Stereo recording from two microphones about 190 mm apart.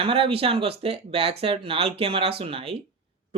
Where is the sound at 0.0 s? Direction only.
30° right (ahead or behind).